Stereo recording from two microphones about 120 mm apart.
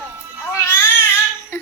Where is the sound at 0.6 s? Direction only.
20° left (ahead or behind).